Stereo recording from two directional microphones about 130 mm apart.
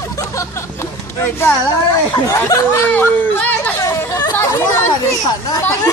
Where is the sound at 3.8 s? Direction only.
25° left (ahead or behind).